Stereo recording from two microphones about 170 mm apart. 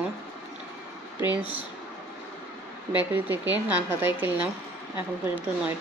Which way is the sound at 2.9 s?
10° right (ahead or behind).